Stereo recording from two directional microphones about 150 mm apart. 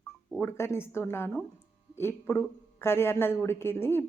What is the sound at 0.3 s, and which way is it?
Speech, 15° left (ahead or behind).